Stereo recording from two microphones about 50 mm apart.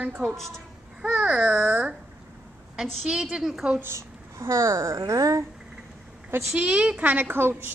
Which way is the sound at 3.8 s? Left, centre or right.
Right.